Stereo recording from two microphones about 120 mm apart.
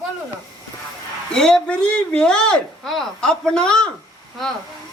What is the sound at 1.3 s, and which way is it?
Speech, 5° left (ahead or behind).